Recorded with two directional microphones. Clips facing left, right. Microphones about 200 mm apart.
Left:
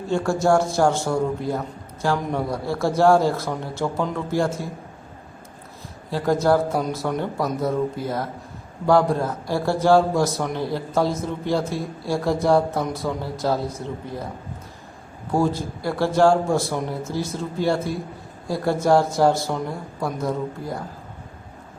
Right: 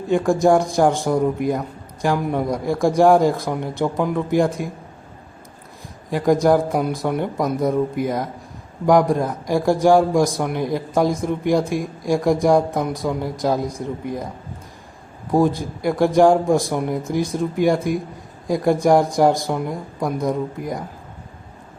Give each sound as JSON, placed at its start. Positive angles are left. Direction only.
{"t": 0.1, "sound": "a man's voice", "side_deg": -15}
{"t": 6.1, "sound": "a man's voice", "side_deg": -15}
{"t": 15.3, "sound": "a man's voice", "side_deg": -15}